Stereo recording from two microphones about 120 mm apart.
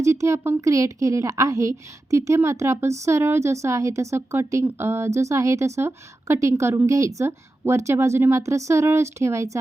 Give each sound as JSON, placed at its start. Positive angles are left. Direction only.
{"t": 0.0, "sound": "speech", "side_deg": -25}